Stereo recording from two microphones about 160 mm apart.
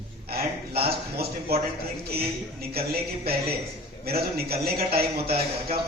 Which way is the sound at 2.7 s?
75° right (ahead or behind).